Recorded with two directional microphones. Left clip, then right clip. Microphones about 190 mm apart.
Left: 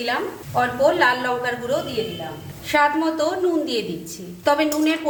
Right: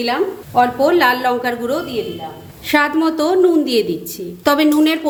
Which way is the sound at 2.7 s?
45° right (ahead or behind).